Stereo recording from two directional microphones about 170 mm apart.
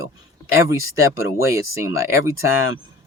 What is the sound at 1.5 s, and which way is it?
Speech, 15° right (ahead or behind).